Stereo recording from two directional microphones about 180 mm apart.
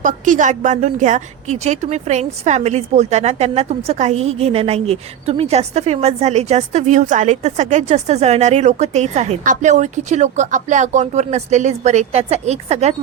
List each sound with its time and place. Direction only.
0.0 s a woman's voice: 45° right (ahead or behind)